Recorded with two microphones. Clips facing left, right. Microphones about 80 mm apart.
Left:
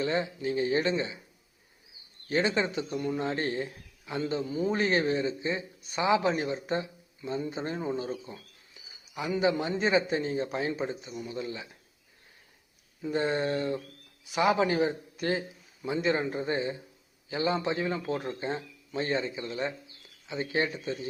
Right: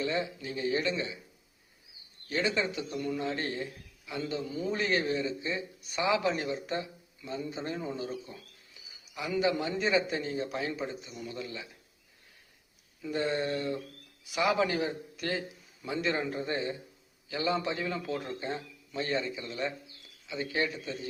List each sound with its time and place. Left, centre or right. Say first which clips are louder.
0.0 s a man's voice: left 3 dB; left
2.3 s a man's voice: left 3 dB; left
13.0 s a man's voice: left 3 dB; left